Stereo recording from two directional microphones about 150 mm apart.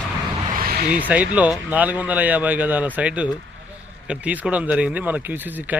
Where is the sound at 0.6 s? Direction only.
80° right.